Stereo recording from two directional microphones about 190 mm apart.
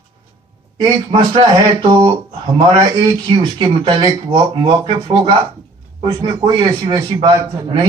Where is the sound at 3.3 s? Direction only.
25° right (ahead or behind).